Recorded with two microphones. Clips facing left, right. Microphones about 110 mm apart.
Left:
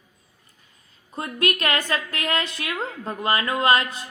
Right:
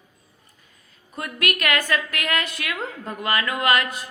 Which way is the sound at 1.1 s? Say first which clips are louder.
Left 2 dB; 30° left (ahead or behind).